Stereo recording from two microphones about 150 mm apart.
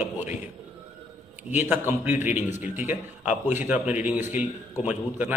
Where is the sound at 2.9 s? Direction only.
50° left (ahead or behind).